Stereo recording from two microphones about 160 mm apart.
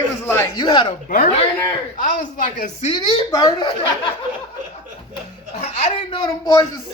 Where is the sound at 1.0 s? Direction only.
55° left (ahead or behind).